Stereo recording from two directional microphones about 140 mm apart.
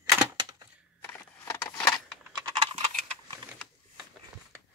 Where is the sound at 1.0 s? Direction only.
15° left (ahead or behind).